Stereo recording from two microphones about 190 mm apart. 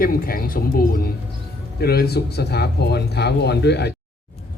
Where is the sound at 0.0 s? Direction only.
50° left (ahead or behind).